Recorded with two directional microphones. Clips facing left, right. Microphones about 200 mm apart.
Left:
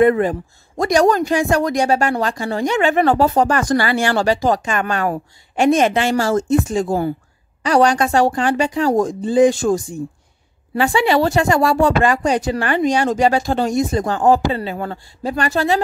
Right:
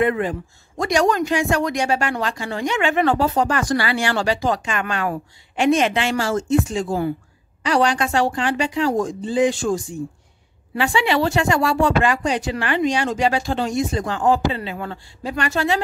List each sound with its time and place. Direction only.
0.0 s speech: 40° left (ahead or behind)